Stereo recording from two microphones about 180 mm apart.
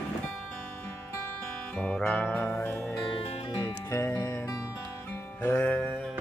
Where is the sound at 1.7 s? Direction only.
5° left (ahead or behind).